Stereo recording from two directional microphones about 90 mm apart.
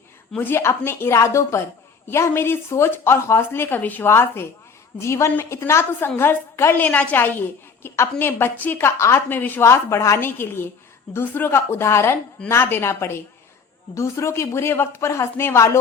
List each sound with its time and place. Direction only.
0.3 s a woman's voice: 25° left (ahead or behind)
9.3 s a woman's voice: 20° left (ahead or behind)